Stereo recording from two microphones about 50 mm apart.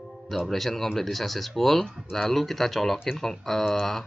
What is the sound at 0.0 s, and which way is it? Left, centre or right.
Speech, centre.